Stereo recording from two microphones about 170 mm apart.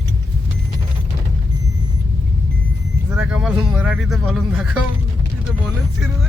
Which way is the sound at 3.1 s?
5° right (ahead or behind).